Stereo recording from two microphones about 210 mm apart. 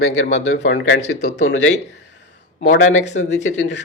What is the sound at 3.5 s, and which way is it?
Speech, 55° left (ahead or behind).